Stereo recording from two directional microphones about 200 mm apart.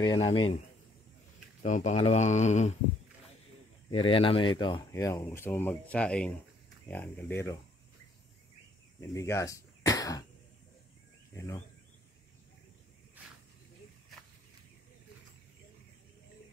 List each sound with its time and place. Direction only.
0.0 s speech: 25° left (ahead or behind)
1.6 s speech: 35° left (ahead or behind)
3.9 s speech: 25° left (ahead or behind); by 7.5 s 10° left (ahead or behind)
9.1 s speech: 15° left (ahead or behind)
11.3 s speech: 15° left (ahead or behind)